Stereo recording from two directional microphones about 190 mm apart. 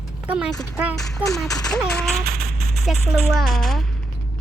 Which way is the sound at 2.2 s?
55° right (ahead or behind).